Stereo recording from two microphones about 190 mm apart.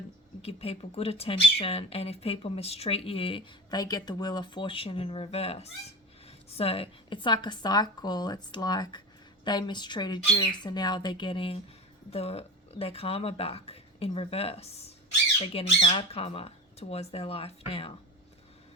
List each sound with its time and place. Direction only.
0.4 s speech: 30° left (ahead or behind)